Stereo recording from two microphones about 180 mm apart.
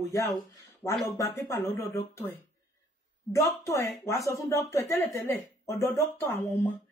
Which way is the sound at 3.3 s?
15° left (ahead or behind).